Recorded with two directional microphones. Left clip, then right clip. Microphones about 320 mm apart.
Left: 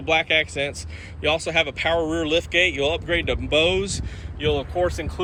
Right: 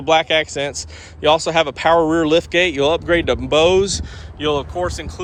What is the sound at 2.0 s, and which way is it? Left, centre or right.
Speech, right.